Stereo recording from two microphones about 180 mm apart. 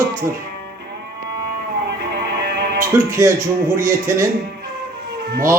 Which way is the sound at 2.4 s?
65° right (ahead or behind).